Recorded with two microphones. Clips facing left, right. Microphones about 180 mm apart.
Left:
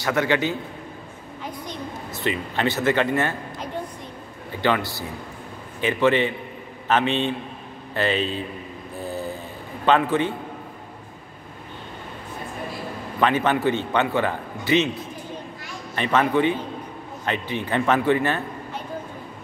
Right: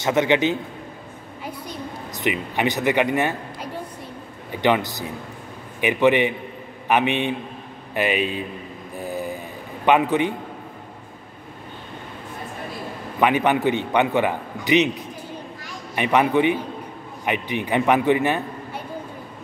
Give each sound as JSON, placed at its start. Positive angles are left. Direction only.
{"t": 0.0, "sound": "a man's voice", "side_deg": -20}
{"t": 1.4, "sound": "a sound", "side_deg": -10}
{"t": 4.5, "sound": "a man's voice", "side_deg": -15}
{"t": 9.0, "sound": "vehicle", "side_deg": -15}
{"t": 9.8, "sound": "a man's voice", "side_deg": -15}
{"t": 13.2, "sound": "a man's voice", "side_deg": -15}
{"t": 15.9, "sound": "a man's voice", "side_deg": -15}